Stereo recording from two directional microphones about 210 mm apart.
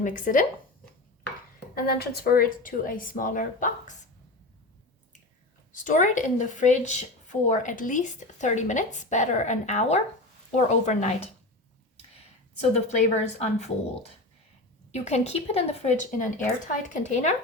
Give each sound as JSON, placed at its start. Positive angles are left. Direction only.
{"t": 0.0, "sound": "a woman's voice", "side_deg": 40}
{"t": 1.7, "sound": "a woman's voice", "side_deg": 50}
{"t": 5.7, "sound": "a woman's voice", "side_deg": 35}
{"t": 12.7, "sound": "a woman's voice", "side_deg": 30}
{"t": 14.9, "sound": "a woman's voice", "side_deg": 30}